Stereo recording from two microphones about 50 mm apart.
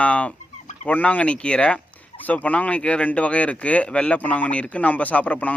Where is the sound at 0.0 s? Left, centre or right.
Left.